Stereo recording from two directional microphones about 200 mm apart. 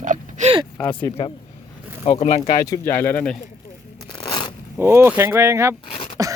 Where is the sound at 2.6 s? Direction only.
15° left (ahead or behind).